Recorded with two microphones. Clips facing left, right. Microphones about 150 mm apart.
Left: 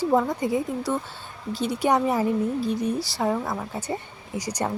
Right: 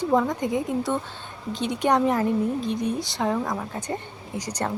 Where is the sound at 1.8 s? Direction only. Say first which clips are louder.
Right 1 dB; 10° left (ahead or behind).